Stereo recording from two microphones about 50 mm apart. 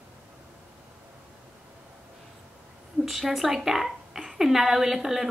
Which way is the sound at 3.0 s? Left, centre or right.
Centre.